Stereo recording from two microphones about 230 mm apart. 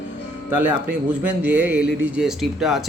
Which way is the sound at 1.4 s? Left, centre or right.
Centre.